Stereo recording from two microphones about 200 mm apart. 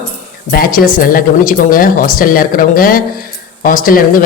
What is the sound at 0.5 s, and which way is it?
Speech, 45° left (ahead or behind).